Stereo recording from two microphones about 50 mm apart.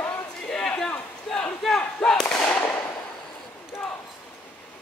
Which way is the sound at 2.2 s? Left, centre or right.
Centre.